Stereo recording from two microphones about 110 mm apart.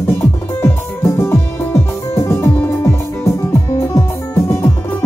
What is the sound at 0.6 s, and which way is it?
Music, 25° left (ahead or behind).